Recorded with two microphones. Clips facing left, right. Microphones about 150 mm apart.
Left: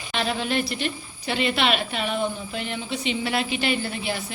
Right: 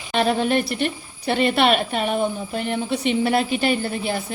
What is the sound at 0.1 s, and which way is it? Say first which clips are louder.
A woman's voice: right 6 dB; 50° right (ahead or behind).